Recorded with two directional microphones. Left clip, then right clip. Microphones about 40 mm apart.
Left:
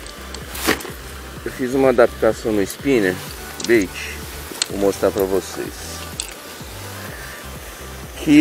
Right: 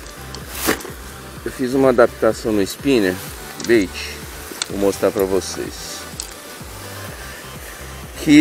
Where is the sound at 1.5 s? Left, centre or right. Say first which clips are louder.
Right 1 dB; right.